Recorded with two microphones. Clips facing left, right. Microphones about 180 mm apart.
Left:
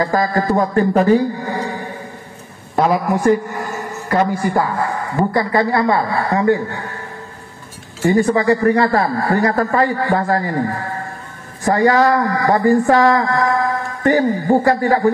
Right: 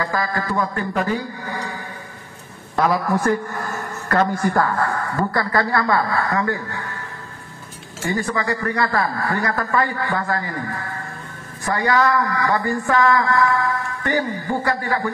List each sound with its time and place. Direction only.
0.0 s a man's voice: 35° left (ahead or behind)
8.1 s speech: 30° left (ahead or behind)